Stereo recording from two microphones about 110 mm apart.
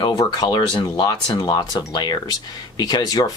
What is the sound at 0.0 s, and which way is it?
Speech, 40° left (ahead or behind).